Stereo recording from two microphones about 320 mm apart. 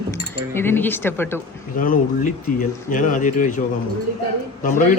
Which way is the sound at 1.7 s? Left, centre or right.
Left.